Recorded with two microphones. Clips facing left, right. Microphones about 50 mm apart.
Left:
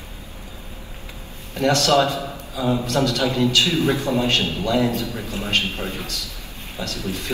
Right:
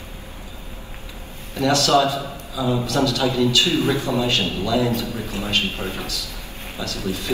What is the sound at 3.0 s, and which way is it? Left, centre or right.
A man's voice, left.